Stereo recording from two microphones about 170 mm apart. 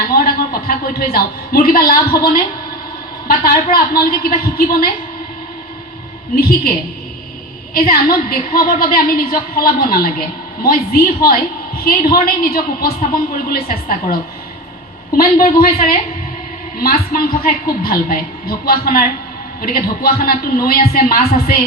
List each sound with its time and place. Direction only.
0.1 s a woman's voice: 60° left (ahead or behind)
6.3 s a woman's voice: 60° left (ahead or behind)
15.2 s a woman's voice: 60° left (ahead or behind)